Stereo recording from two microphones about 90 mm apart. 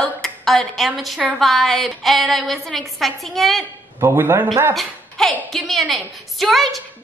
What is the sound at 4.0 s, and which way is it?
Speech, 25° right (ahead or behind).